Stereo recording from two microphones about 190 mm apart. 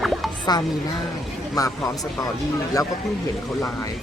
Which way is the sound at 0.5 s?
20° left (ahead or behind).